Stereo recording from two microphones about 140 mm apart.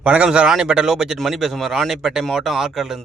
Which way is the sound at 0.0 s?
10° right (ahead or behind).